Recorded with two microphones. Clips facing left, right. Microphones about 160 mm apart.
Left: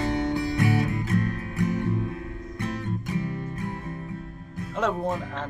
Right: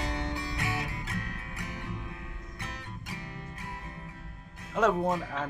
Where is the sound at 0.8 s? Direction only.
50° left (ahead or behind).